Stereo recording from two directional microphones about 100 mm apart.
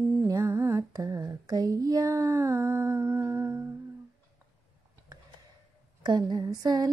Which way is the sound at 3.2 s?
25° right (ahead or behind).